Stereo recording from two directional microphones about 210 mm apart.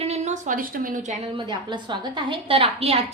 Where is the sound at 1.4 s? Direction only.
20° right (ahead or behind).